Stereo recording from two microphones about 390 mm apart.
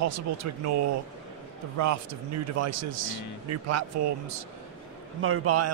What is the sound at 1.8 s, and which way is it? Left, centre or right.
Speech, right.